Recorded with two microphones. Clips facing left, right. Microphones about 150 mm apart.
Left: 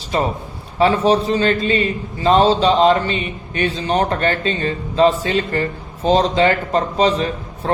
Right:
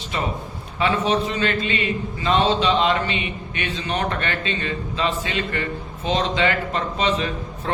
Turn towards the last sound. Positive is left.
turn(degrees=35)  # may be behind; listen again after turning